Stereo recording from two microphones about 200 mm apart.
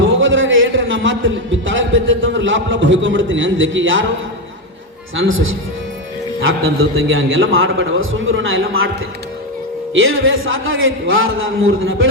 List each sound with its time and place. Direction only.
0.2 s a man's voice: 75° right (ahead or behind)
5.1 s a man's voice: 80° right
9.9 s a man's voice: 80° right